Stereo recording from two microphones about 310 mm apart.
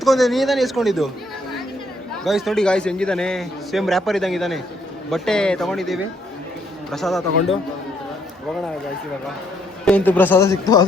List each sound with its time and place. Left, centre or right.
0.0 s a man's voice: centre
2.2 s a man's voice: centre
9.8 s a man's voice: centre